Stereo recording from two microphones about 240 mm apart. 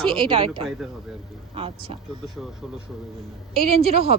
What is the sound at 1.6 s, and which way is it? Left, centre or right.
Speech, right.